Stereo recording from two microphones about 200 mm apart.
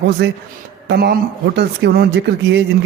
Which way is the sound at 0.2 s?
60° right (ahead or behind).